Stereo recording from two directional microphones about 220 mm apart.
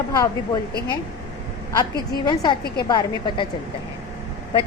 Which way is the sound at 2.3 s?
20° left (ahead or behind).